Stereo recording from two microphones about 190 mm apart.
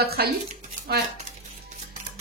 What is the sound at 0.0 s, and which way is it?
Speech, 55° right (ahead or behind).